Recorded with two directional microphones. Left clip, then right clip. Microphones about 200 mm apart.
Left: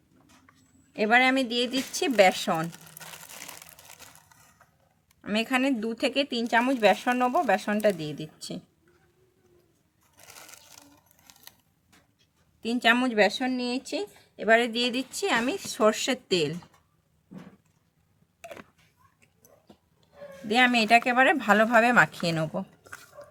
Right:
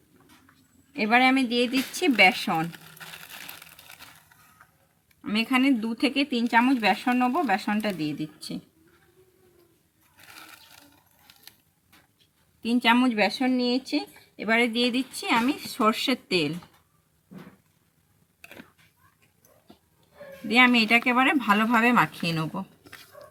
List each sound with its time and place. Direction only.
0.9 s speech: 55° left (ahead or behind)
5.2 s speech: 50° left (ahead or behind)
12.6 s speech: 50° left (ahead or behind)
20.6 s speech: 45° left (ahead or behind)